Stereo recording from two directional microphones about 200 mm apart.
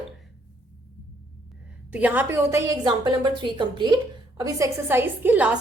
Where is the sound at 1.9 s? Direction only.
5° right (ahead or behind).